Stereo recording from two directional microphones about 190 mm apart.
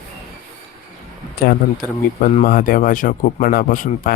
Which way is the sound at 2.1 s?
45° left (ahead or behind).